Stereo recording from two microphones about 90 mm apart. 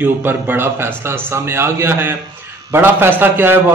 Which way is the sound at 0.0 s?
20° right (ahead or behind).